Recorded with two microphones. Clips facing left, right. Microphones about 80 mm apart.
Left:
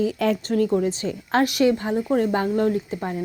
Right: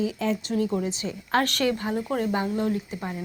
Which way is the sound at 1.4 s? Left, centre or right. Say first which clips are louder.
Left 6 dB; centre.